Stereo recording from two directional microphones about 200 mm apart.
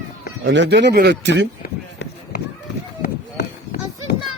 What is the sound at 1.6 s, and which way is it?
Run, 50° left (ahead or behind).